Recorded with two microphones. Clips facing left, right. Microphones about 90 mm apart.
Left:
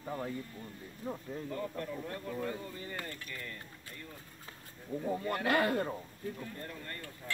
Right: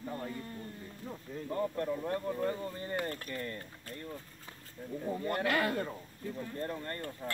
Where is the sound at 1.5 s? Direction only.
30° right (ahead or behind).